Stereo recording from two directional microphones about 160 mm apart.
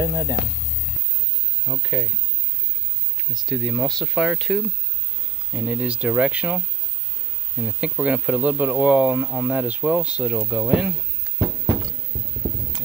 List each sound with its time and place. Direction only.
0.0 s hum: 20° right (ahead or behind)
1.8 s speech: 5° right (ahead or behind)
3.3 s speech: centre (ahead or behind)